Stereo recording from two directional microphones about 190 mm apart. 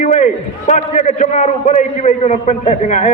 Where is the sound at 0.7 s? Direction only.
40° left (ahead or behind).